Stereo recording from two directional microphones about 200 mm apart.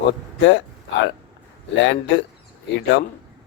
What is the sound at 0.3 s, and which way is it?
Speech, 60° left (ahead or behind).